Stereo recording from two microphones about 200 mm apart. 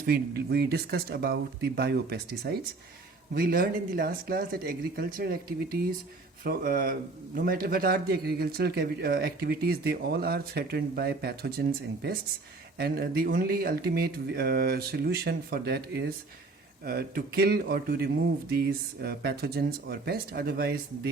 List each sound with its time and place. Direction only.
0.0 s a man's voice: 50° right (ahead or behind)